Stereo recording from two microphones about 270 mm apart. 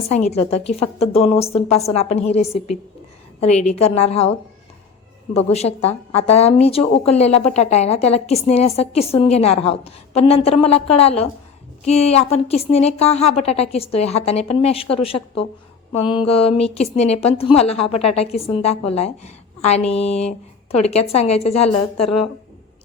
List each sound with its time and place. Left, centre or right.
0.1 s speech: left
3.8 s speech: left
5.3 s speech: left
22.0 s speech: left